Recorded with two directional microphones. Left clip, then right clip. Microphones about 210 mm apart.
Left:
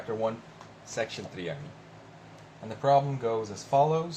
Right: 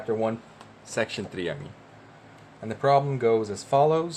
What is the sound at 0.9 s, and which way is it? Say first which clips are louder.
Speech: right 5 dB; 45° right (ahead or behind).